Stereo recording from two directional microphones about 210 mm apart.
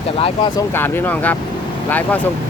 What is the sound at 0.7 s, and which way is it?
Speech, 10° left (ahead or behind).